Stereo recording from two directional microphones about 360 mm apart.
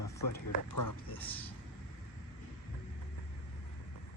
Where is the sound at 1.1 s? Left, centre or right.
Centre.